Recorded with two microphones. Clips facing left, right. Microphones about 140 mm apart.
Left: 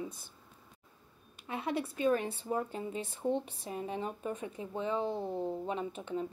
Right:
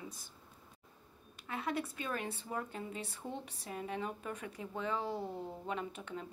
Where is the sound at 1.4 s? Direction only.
25° left (ahead or behind).